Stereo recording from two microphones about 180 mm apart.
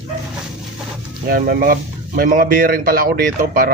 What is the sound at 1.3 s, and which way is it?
Speech, 55° right (ahead or behind).